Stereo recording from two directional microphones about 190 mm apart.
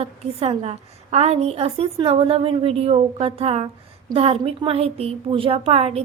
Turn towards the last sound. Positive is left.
turn(degrees=-30)  # may be behind; listen again after turning